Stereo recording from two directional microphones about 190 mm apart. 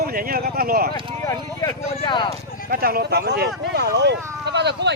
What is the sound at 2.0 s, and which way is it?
Speech, 25° left (ahead or behind).